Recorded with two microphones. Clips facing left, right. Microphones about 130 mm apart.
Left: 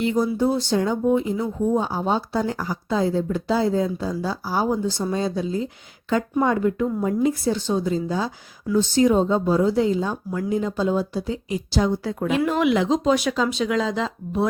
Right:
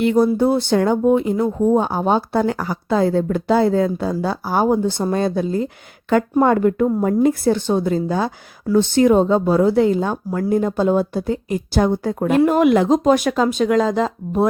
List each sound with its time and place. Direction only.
0.0 s a woman's voice: 60° right (ahead or behind)